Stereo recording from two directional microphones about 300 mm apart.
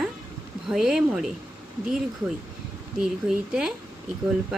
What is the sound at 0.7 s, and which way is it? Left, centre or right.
Speech, centre.